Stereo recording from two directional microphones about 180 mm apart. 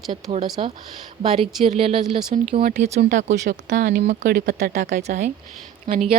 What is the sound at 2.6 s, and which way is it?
Speech, 50° right (ahead or behind).